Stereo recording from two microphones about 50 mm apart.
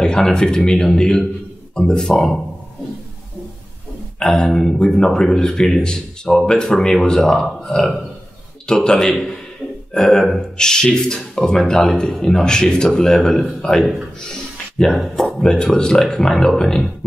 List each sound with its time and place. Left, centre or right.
0.0 s speech: centre
4.4 s speech: centre
14.8 s speech: centre